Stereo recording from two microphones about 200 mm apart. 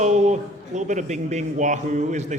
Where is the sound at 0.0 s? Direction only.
35° right (ahead or behind).